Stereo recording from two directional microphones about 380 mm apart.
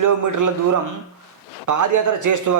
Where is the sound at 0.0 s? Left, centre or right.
Right.